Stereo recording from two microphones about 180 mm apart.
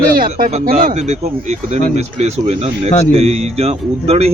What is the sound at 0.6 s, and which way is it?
Speech, 55° right (ahead or behind).